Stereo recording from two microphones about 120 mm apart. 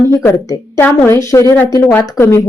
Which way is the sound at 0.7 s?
20° left (ahead or behind).